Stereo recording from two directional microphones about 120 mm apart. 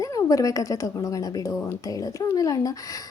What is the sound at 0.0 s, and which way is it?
A woman's voice, 30° left (ahead or behind).